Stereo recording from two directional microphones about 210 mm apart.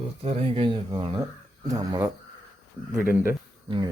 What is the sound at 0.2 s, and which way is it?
Speech, 30° right (ahead or behind).